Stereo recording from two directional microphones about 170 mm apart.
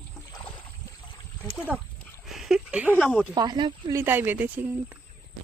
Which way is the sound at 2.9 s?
Centre (ahead or behind).